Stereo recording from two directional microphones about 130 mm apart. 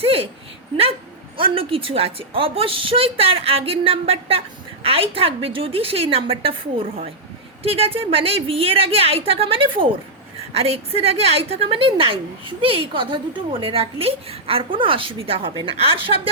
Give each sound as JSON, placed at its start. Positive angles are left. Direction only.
{"t": 0.0, "sound": "a woman's voice", "side_deg": -50}
{"t": 1.4, "sound": "a woman's voice", "side_deg": -45}